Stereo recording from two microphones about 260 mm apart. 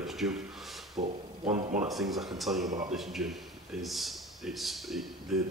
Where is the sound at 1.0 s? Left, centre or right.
Right.